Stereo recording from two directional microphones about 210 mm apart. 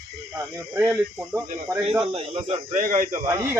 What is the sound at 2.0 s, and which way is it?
Speech, 30° right (ahead or behind).